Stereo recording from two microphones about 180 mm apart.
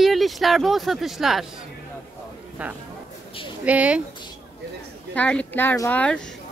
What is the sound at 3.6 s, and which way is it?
Speech, 10° right (ahead or behind).